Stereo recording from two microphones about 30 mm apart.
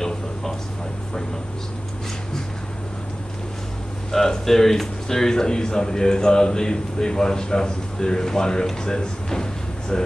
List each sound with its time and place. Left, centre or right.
0.0 s a sound: centre
4.1 s speech: centre
5.3 s a man's voice: left